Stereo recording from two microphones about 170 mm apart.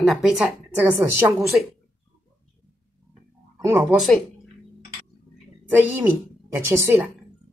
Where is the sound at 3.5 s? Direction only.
15° right (ahead or behind).